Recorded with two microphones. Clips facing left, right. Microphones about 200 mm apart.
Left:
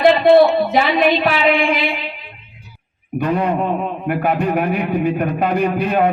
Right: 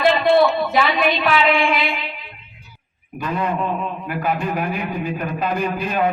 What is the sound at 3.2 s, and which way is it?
Speech, 65° left (ahead or behind).